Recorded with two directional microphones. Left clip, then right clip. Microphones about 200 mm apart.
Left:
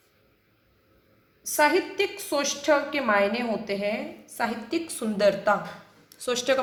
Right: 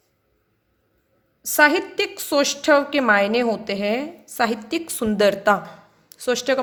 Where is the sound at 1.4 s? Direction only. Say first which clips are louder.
Right 6 dB; 60° right (ahead or behind).